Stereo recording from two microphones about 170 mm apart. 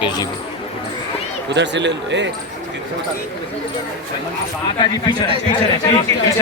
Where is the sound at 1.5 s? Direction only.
90° right.